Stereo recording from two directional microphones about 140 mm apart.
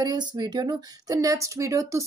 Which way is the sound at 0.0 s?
30° right (ahead or behind).